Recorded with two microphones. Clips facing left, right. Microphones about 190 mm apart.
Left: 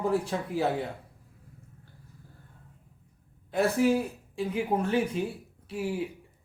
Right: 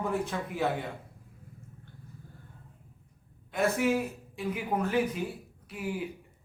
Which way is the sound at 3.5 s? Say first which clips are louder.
Left 3 dB; 35° left (ahead or behind).